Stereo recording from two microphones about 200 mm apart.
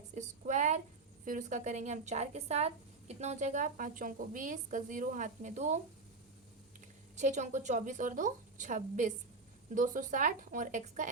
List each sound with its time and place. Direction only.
0.1 s a woman's voice: 35° right (ahead or behind)
7.2 s a woman's voice: 35° right (ahead or behind)